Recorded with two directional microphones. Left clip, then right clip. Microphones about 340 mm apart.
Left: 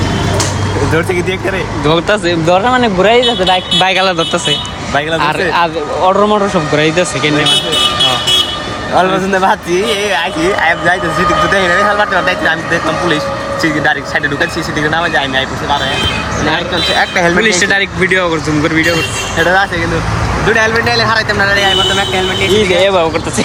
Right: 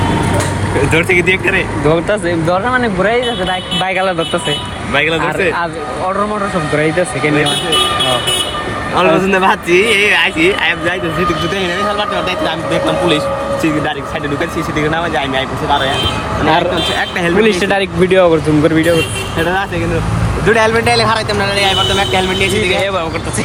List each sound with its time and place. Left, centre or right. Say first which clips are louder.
1.1 s speech: right 4 dB; left
1.9 s speech: left 3 dB; centre
9.0 s speech: even; centre
10.6 s speech: left 4 dB; centre
17.2 s speech: even; centre
20.5 s speech: right 1 dB; centre
21.9 s speech: even; centre
22.8 s speech: left 6 dB; centre